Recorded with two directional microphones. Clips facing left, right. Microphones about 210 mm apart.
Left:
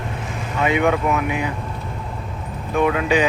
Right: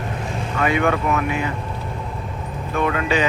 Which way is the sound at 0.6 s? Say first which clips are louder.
Left 1 dB; 15° left (ahead or behind).